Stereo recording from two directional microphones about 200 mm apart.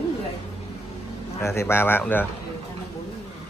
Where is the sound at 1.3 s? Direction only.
15° left (ahead or behind).